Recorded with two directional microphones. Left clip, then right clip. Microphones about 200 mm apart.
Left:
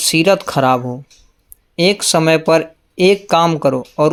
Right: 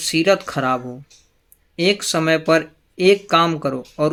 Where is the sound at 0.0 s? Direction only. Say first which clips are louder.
Left 4 dB; 25° left (ahead or behind).